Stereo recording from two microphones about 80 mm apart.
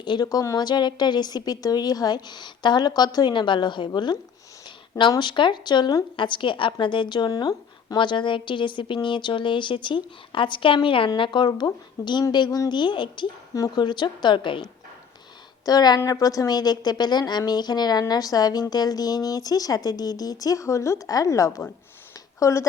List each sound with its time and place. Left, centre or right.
0.0 s a woman's voice: left
5.2 s speech: left
6.1 s a woman's voice: left
11.2 s a woman's voice: left
13.7 s speech: left
15.6 s a woman's voice: left